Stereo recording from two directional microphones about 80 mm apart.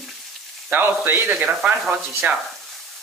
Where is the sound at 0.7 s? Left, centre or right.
Right.